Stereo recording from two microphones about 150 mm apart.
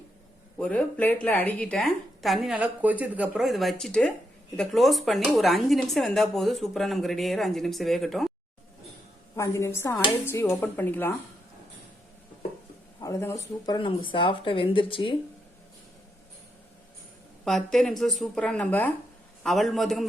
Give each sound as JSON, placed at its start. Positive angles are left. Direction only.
{"t": 0.6, "sound": "speech", "side_deg": 10}
{"t": 9.3, "sound": "speech", "side_deg": 20}
{"t": 13.0, "sound": "speech", "side_deg": 20}
{"t": 13.7, "sound": "speech", "side_deg": 35}
{"t": 17.4, "sound": "speech", "side_deg": 0}